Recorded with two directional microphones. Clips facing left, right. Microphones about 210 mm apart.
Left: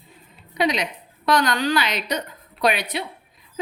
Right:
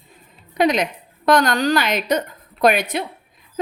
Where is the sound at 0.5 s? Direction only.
50° right (ahead or behind).